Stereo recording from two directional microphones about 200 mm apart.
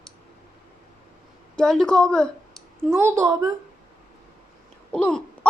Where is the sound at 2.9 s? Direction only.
15° right (ahead or behind).